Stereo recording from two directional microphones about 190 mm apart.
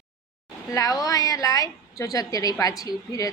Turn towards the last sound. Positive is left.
turn(degrees=20)  # may be behind; listen again after turning